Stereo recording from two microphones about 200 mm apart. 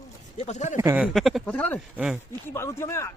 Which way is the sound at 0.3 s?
35° left (ahead or behind).